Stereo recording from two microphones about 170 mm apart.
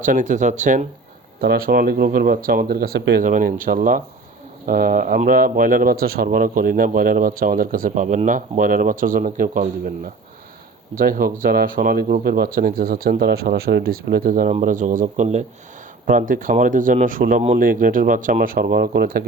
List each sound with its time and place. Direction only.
0.0 s speech: 50° right (ahead or behind)
1.4 s speech: 60° right (ahead or behind)
3.2 s speech: 50° right (ahead or behind)